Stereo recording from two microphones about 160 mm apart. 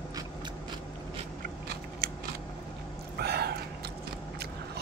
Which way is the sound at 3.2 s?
90° right.